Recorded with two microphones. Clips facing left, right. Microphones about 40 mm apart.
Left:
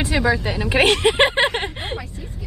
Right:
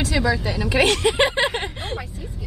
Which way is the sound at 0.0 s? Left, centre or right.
Left.